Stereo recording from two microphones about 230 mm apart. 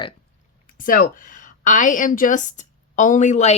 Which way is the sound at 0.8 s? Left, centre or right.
Left.